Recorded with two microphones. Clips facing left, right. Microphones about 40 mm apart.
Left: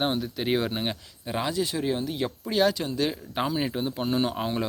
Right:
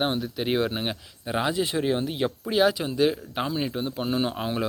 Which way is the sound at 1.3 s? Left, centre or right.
Right.